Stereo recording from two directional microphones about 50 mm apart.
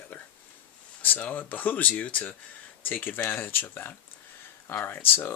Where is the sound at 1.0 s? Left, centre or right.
Left.